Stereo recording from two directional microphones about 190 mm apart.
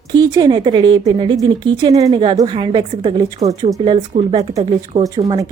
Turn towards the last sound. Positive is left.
turn(degrees=-20)  # may be behind; listen again after turning